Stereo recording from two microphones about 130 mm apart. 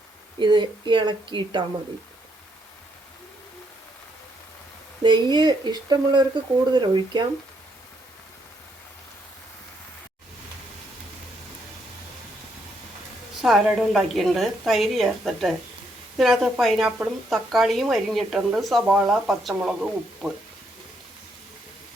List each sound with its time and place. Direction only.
0.3 s a woman's voice: 35° right (ahead or behind)
5.0 s a woman's voice: 35° right (ahead or behind)
13.4 s speech: 5° right (ahead or behind)